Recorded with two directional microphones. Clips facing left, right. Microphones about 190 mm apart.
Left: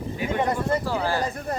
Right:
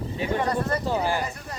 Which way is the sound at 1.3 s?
55° left (ahead or behind).